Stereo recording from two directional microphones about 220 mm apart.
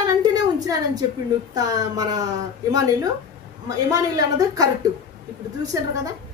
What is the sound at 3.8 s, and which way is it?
Speech, 15° right (ahead or behind).